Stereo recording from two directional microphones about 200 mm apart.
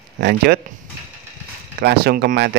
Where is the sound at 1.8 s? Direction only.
50° right (ahead or behind).